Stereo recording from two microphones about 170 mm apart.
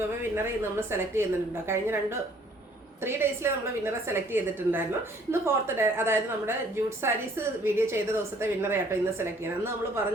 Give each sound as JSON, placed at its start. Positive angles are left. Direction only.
{"t": 0.2, "sound": "a woman's voice", "side_deg": -15}